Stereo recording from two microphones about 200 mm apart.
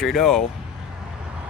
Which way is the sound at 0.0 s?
Centre (ahead or behind).